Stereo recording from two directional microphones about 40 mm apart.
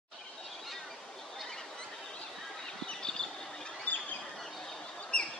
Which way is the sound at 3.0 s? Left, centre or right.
Centre.